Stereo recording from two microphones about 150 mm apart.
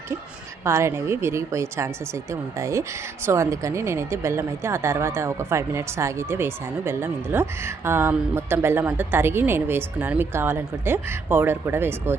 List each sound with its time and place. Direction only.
0.6 s a woman's voice: 20° right (ahead or behind)